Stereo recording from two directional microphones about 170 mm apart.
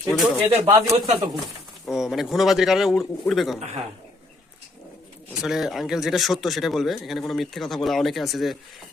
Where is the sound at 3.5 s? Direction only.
35° right (ahead or behind).